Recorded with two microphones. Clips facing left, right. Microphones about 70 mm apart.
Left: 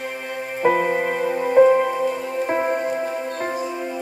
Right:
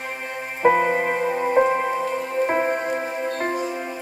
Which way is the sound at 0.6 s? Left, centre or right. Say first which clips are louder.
Right 1 dB; right.